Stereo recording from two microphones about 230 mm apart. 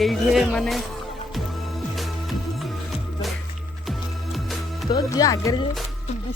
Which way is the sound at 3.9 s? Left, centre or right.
Centre.